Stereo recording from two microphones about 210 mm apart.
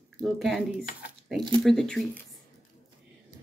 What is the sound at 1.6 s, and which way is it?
Speech, centre (ahead or behind).